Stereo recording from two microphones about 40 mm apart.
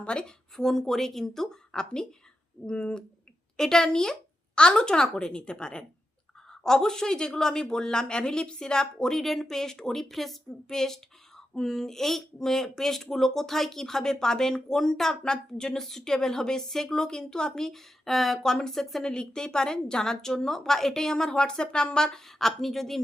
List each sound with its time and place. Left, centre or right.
0.0 s speech: left
0.5 s speech: centre
9.1 s speech: centre
17.6 s speech: centre
19.1 s speech: centre